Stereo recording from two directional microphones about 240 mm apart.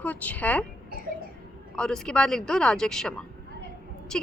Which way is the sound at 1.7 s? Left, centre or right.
Centre.